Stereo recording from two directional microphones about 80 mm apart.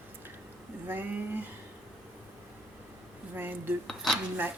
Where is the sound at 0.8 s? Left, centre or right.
Right.